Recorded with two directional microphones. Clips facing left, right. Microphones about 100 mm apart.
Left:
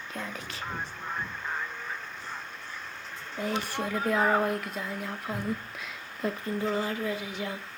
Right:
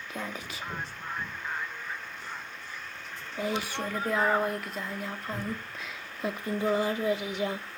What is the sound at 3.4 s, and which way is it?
Speech, centre (ahead or behind).